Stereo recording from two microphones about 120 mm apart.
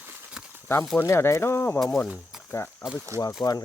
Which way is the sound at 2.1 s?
Centre (ahead or behind).